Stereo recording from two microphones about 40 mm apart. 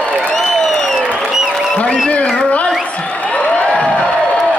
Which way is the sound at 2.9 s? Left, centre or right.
Left.